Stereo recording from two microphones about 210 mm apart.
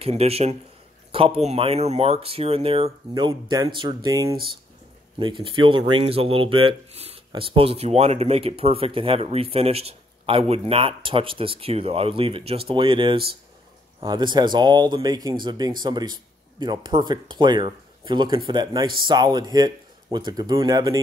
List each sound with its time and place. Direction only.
0.0 s speech: 30° right (ahead or behind)